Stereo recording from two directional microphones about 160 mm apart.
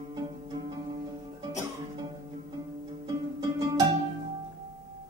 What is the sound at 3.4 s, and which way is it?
Music, 25° right (ahead or behind).